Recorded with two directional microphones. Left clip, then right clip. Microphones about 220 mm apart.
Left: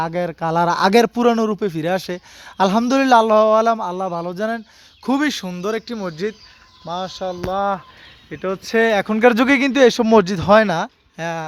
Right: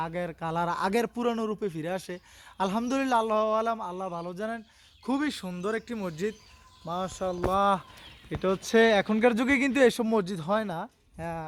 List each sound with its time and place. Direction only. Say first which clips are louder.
0.0 s a man's voice: left 11 dB; 50° left (ahead or behind); by 7.1 s 10° left (ahead or behind)
7.2 s speech: left 3 dB; 5° right (ahead or behind)
8.8 s speech: left 9 dB; centre (ahead or behind)